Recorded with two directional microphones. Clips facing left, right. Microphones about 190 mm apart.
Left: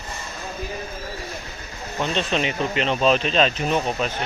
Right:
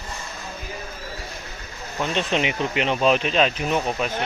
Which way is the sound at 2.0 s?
15° right (ahead or behind).